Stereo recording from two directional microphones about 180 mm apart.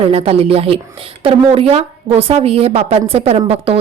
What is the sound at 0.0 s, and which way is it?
A woman's voice, 35° right (ahead or behind).